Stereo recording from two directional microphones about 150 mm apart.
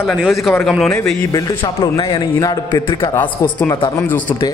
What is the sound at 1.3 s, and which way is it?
A man's voice, 25° left (ahead or behind).